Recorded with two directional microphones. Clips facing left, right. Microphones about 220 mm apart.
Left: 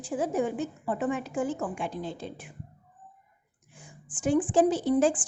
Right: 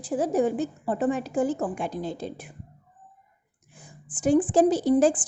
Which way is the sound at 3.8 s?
40° right (ahead or behind).